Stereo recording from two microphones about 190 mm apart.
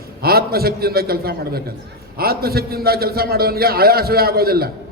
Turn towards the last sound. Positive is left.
turn(degrees=-55)  # may be behind; listen again after turning